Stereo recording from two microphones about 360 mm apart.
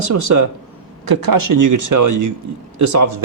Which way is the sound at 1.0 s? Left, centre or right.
Right.